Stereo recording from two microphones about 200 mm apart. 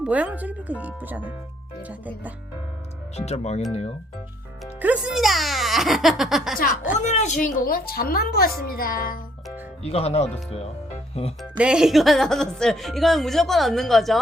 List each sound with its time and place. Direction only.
0.0 s speech: 5° right (ahead or behind)
3.2 s speech: 30° left (ahead or behind)
4.6 s a child's voice: 5° right (ahead or behind)
7.0 s speech: 35° left (ahead or behind)
7.4 s a woman's voice: 45° left (ahead or behind)
9.8 s speech: 30° left (ahead or behind)
11.5 s a woman's voice: 5° right (ahead or behind)